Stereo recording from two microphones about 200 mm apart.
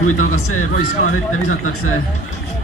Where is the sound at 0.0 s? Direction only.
90° left.